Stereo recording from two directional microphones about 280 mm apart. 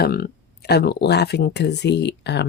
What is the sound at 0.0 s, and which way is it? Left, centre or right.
Speech, left.